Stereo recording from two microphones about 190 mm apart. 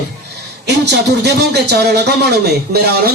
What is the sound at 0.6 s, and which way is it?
Speech, 60° right (ahead or behind).